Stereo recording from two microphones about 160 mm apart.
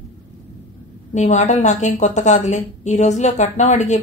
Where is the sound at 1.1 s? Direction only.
45° left (ahead or behind).